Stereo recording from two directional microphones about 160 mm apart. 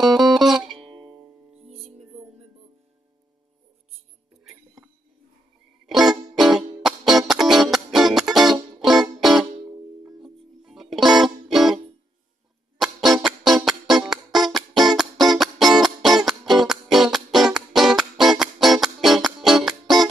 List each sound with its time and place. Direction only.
0.0 s music: centre (ahead or behind)
0.7 s music: 30° right (ahead or behind)
1.7 s music: 40° right (ahead or behind)
5.9 s music: centre (ahead or behind)